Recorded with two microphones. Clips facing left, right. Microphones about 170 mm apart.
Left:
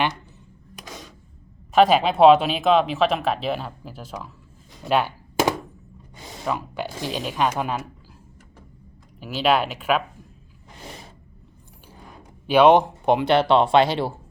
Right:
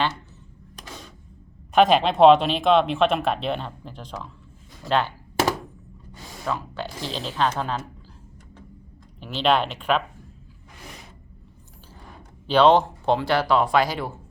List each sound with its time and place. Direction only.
1.7 s speech: centre (ahead or behind)
4.8 s a sound: 10° left (ahead or behind)
6.1 s speech: 20° left (ahead or behind)
9.2 s speech: 5° left (ahead or behind)
12.5 s speech: 10° left (ahead or behind)